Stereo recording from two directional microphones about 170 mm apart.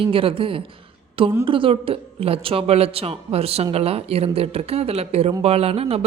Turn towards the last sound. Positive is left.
turn(degrees=-35)  # may be behind; listen again after turning